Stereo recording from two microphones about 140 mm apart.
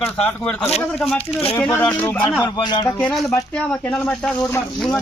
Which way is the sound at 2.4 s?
30° left (ahead or behind).